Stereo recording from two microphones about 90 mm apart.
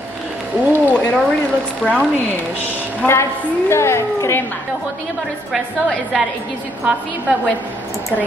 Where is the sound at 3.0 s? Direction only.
30° left (ahead or behind).